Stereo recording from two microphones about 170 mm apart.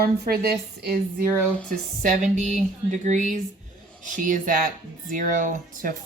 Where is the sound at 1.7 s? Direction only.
50° right (ahead or behind).